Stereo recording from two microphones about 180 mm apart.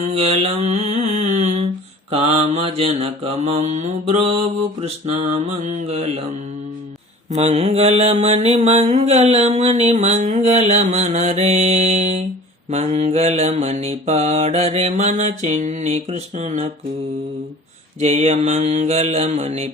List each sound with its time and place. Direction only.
0.0 s mantra: 35° right (ahead or behind)
7.3 s mantra: 35° right (ahead or behind)
18.0 s mantra: 40° right (ahead or behind)